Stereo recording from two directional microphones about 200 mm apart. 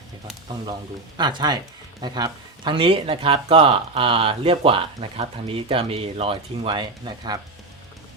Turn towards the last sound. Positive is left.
turn(degrees=-20)  # may be behind; listen again after turning